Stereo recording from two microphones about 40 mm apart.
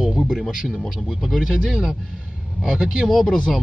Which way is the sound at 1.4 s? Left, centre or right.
Centre.